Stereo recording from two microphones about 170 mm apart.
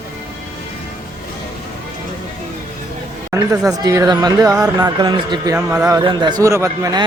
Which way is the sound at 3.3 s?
20° right (ahead or behind).